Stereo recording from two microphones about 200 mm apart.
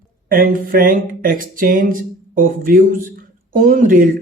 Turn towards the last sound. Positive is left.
turn(degrees=-45)  # may be behind; listen again after turning